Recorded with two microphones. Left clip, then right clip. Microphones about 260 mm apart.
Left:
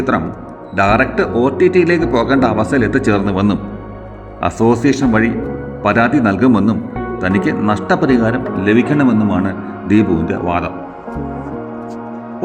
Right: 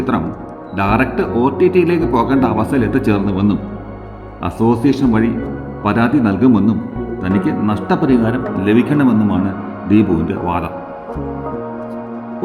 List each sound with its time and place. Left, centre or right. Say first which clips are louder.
0.8 s a man's voice: left 3 dB; centre